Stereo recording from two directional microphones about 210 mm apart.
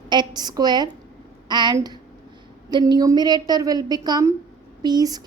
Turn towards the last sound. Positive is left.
turn(degrees=-20)  # may be behind; listen again after turning